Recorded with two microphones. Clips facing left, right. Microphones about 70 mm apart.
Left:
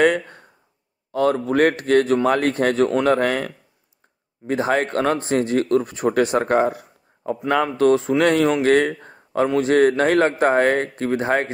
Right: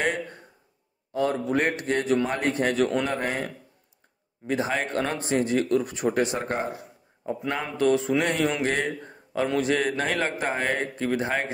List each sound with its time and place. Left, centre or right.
1.1 s a man's voice: left
8.2 s speech: left